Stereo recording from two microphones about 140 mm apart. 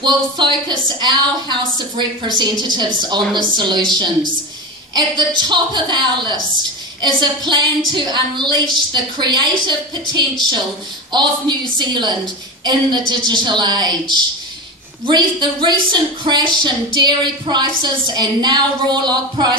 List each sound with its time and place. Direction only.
0.0 s a woman's voice: 30° right (ahead or behind)
4.9 s a woman's voice: 30° right (ahead or behind)
13.1 s a woman's voice: 35° right (ahead or behind)